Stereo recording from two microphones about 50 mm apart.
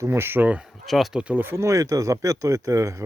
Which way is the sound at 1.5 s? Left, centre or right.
Right.